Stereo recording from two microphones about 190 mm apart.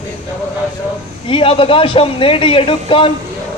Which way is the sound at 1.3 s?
30° left (ahead or behind).